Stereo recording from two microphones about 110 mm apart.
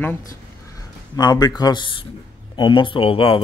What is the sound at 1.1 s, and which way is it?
Speech, 35° left (ahead or behind).